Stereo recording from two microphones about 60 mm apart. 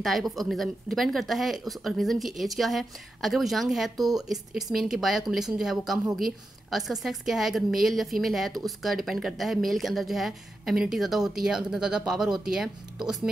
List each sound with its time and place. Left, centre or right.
0.0 s a woman's voice: centre